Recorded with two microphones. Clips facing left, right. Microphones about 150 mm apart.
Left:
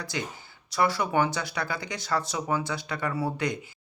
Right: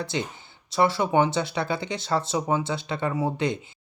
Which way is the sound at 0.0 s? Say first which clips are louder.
Right 4 dB; 25° right (ahead or behind).